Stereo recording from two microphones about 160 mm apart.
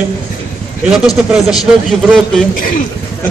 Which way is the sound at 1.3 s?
Centre (ahead or behind).